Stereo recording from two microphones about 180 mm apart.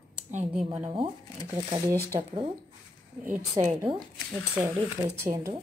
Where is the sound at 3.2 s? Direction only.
10° right (ahead or behind).